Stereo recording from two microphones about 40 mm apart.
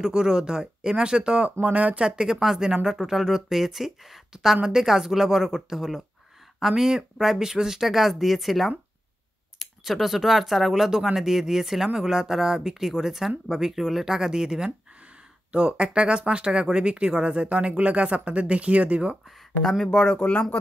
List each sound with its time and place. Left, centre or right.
0.1 s speech: centre
1.6 s speech: right
2.0 s speech: centre
19.8 s speech: centre
20.2 s speech: left